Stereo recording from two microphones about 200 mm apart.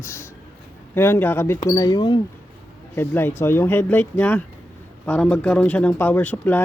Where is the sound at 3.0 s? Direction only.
10° left (ahead or behind).